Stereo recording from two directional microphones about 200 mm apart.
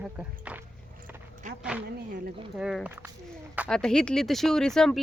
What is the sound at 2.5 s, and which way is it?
Speech, 5° right (ahead or behind).